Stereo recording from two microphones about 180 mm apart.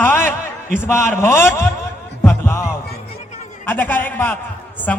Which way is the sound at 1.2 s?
15° left (ahead or behind).